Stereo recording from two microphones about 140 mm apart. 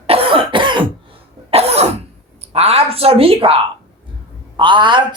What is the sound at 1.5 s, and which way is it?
A woman's voice, 50° right (ahead or behind).